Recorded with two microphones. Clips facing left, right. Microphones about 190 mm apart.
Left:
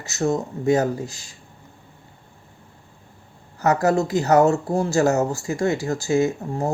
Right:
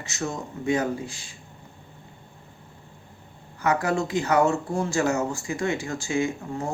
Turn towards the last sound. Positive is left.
turn(degrees=40)  # may be behind; listen again after turning